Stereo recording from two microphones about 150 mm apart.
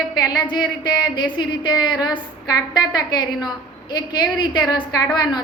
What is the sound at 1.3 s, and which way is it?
A woman's voice, 30° left (ahead or behind).